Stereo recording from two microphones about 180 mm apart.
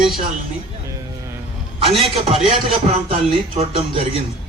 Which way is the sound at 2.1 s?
35° right (ahead or behind).